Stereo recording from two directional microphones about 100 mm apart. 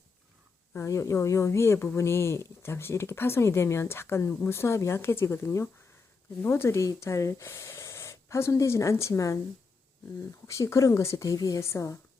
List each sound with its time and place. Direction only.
0.7 s speech: 30° left (ahead or behind)
10.4 s speech: 30° left (ahead or behind)